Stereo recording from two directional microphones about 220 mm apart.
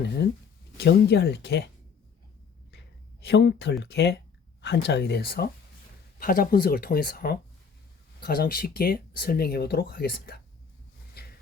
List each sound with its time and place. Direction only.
0.0 s speech: 50° left (ahead or behind)
3.2 s speech: 50° left (ahead or behind)
11.2 s a sound: 45° left (ahead or behind)